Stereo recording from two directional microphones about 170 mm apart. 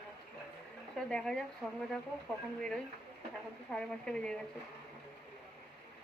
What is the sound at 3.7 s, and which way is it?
Speech, 5° left (ahead or behind).